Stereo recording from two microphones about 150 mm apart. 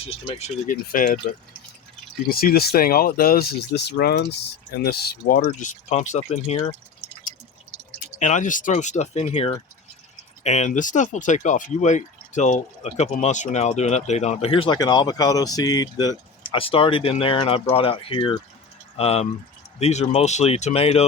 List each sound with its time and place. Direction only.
0.0 s speech: 40° left (ahead or behind)
0.7 s speech: 70° left (ahead or behind)
2.3 s speech: 85° left; by 6.6 s 50° left (ahead or behind)
8.2 s speech: 55° left (ahead or behind); by 14.8 s 35° left (ahead or behind)
14.8 s speech: 25° left (ahead or behind); by 21.1 s 45° left (ahead or behind)